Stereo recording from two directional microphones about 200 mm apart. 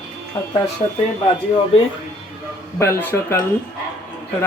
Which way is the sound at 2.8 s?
15° left (ahead or behind).